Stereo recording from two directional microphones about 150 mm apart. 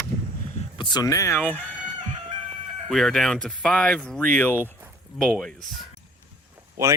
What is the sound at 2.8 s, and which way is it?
Speech, centre (ahead or behind).